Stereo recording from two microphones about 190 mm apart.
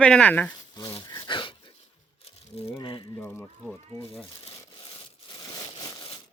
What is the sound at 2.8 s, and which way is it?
Speech, 25° left (ahead or behind).